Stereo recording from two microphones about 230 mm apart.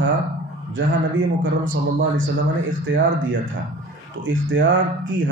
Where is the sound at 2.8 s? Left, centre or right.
Right.